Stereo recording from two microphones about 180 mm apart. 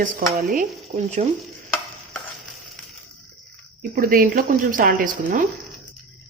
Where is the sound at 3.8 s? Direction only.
55° right (ahead or behind).